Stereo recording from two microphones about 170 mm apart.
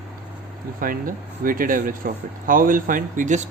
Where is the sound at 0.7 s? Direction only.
55° right (ahead or behind).